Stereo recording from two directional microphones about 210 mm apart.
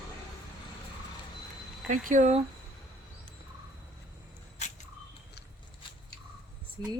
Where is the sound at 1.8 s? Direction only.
40° right (ahead or behind).